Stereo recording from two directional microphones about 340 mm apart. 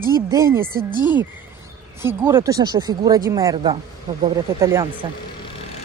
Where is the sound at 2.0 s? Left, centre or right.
Centre.